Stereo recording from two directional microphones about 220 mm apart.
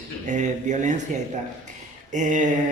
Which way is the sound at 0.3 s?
35° right (ahead or behind).